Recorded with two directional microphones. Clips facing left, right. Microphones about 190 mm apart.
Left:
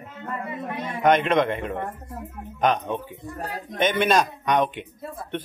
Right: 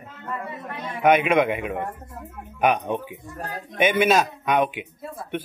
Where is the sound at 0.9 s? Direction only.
10° right (ahead or behind).